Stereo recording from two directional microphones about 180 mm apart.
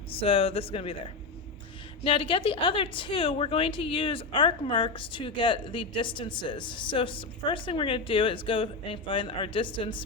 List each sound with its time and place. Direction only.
0.2 s speech: 30° left (ahead or behind)
2.0 s a woman's voice: 30° left (ahead or behind)